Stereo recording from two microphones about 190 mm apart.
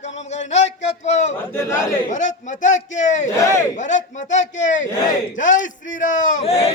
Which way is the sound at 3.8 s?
40° left (ahead or behind).